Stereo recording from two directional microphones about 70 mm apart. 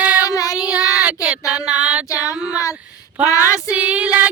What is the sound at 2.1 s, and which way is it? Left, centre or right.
Child singing, left.